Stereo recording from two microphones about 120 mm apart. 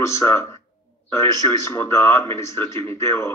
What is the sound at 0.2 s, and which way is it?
A man's voice, 20° left (ahead or behind).